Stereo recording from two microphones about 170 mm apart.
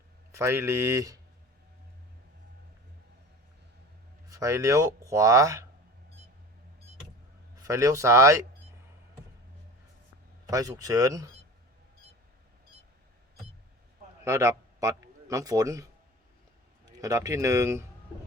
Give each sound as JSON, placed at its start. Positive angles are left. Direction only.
{"t": 0.3, "sound": "speech", "side_deg": -15}
{"t": 4.3, "sound": "speech", "side_deg": -20}
{"t": 7.6, "sound": "speech", "side_deg": -20}
{"t": 10.4, "sound": "speech", "side_deg": -20}
{"t": 14.3, "sound": "a man's voice", "side_deg": -15}
{"t": 17.0, "sound": "speech", "side_deg": -20}